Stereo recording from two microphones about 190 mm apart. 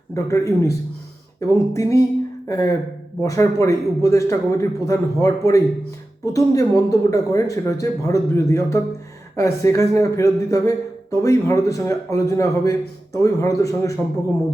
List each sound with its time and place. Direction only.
0.1 s a man's voice: 15° left (ahead or behind)